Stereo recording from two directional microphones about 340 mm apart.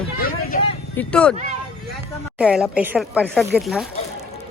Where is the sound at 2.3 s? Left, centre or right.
Centre.